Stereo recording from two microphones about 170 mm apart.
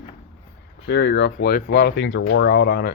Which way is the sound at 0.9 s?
90° left.